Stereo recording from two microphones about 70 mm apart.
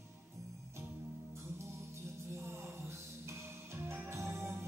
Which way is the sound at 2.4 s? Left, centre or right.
Right.